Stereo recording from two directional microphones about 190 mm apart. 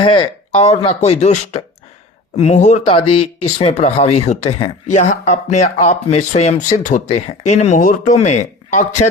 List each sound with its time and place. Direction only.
0.0 s speech: 30° left (ahead or behind)